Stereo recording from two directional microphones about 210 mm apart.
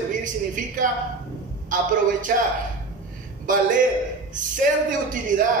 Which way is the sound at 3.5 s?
40° right (ahead or behind).